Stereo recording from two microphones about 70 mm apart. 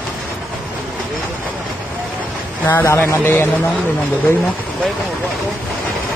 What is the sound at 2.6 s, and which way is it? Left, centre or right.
Speech, left.